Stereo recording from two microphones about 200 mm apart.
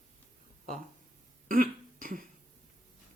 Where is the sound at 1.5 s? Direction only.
45° right (ahead or behind).